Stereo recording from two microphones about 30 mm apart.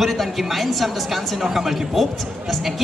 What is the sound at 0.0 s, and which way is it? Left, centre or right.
Speech, centre.